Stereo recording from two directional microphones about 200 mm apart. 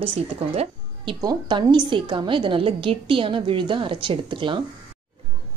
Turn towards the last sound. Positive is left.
turn(degrees=-25)  # may be behind; listen again after turning